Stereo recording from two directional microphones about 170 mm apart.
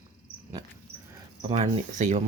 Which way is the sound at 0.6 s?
25° right (ahead or behind).